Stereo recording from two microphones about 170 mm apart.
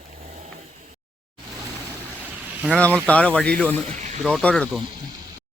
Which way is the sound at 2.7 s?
10° left (ahead or behind).